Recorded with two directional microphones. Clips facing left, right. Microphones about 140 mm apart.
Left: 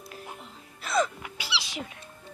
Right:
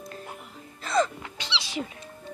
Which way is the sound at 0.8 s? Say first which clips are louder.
Right 2 dB; 5° left (ahead or behind).